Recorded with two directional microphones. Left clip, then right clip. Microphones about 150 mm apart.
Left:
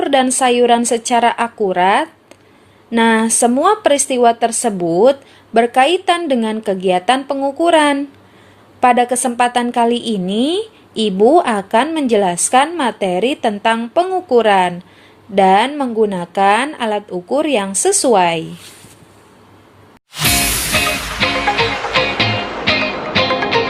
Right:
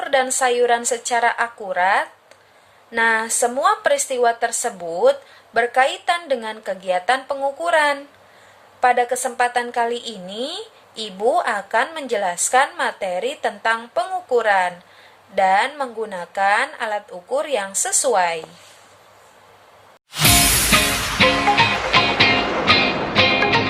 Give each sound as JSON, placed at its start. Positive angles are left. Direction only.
{"t": 0.0, "sound": "a woman's voice", "side_deg": 35}
{"t": 20.1, "sound": "music", "side_deg": 0}